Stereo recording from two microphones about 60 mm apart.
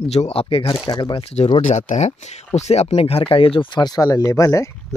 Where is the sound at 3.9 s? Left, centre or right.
Left.